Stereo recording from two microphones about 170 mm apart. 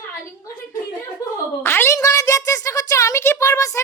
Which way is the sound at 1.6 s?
15° left (ahead or behind).